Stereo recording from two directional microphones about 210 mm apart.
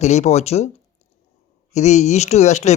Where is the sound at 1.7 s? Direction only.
35° left (ahead or behind).